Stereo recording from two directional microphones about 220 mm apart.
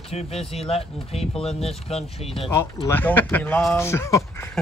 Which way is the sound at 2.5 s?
10° left (ahead or behind).